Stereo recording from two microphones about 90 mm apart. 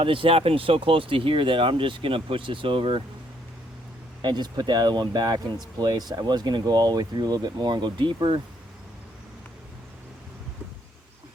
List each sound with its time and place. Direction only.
0.0 s speech: 80° right
4.2 s speech: 55° right (ahead or behind)